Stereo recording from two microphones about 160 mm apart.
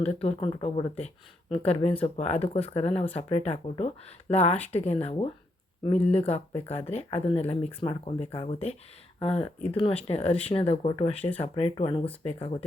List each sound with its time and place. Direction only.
0.2 s speech: 40° left (ahead or behind)